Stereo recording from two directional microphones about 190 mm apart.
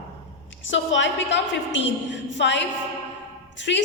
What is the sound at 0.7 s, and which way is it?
A woman's voice, 75° left (ahead or behind).